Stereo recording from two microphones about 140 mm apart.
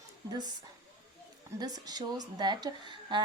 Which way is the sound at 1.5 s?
30° right (ahead or behind).